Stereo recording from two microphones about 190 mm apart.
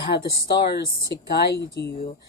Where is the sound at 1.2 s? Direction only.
60° left (ahead or behind).